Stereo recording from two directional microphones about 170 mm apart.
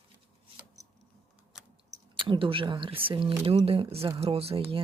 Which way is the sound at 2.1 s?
30° right (ahead or behind).